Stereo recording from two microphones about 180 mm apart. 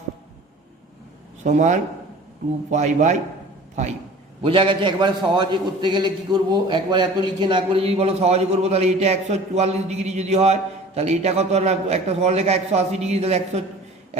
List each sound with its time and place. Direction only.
1.5 s a man's voice: 40° right (ahead or behind)
4.4 s a man's voice: 30° right (ahead or behind)